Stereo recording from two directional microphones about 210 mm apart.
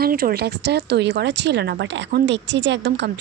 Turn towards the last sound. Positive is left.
turn(degrees=-55)  # may be behind; listen again after turning